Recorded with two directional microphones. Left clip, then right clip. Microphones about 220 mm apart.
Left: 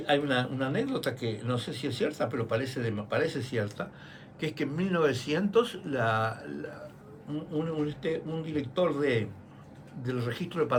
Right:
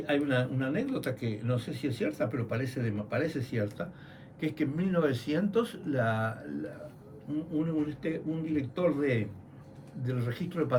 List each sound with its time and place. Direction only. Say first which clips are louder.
0.0 s speech: left 2 dB; 25° left (ahead or behind)
7.9 s speech: left 2 dB; 25° left (ahead or behind)